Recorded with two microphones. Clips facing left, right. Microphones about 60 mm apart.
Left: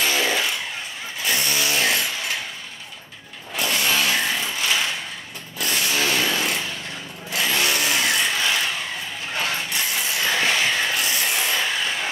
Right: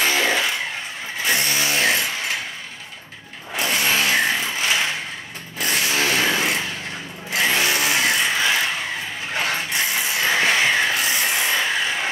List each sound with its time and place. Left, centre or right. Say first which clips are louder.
0.0 s chainsaw: right 2 dB; right
3.6 s a sound: right 1 dB; centre
5.6 s chainsaw: right 2 dB; right
7.3 s tools: right 2 dB; right
9.3 s mechanisms: right 2 dB; right